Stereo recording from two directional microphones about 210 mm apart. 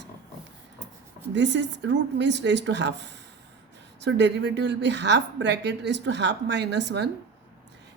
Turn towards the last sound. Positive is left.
turn(degrees=-55)  # may be behind; listen again after turning